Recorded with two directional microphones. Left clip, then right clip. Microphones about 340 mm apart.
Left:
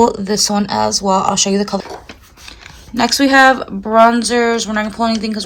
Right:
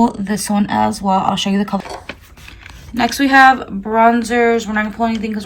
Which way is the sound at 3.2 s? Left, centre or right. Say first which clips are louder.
Even; centre.